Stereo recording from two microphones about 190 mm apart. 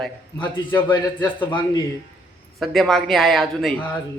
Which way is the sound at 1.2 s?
25° left (ahead or behind).